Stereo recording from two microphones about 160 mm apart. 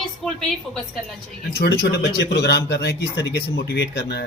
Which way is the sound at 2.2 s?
90° left.